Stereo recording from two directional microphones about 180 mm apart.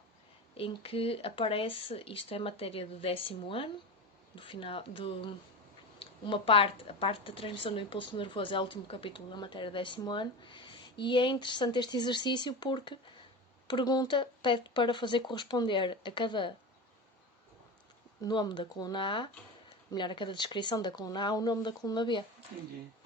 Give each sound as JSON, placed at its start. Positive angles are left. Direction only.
{"t": 0.5, "sound": "speech", "side_deg": 30}
{"t": 18.2, "sound": "speech", "side_deg": 25}